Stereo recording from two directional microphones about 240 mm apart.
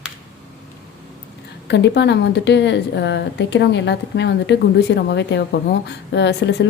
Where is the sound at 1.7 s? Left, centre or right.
Left.